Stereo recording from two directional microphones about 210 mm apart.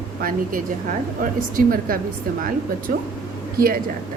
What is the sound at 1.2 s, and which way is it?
A woman's voice, 40° right (ahead or behind).